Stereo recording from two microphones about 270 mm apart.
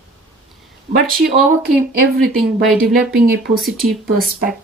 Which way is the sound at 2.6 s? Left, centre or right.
Centre.